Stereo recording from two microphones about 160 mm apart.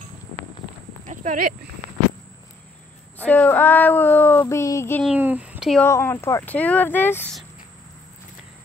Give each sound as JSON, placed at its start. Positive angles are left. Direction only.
{"t": 1.0, "sound": "speech", "side_deg": -55}
{"t": 3.2, "sound": "child singing", "side_deg": 10}
{"t": 5.0, "sound": "speech", "side_deg": -10}
{"t": 5.8, "sound": "child singing", "side_deg": 15}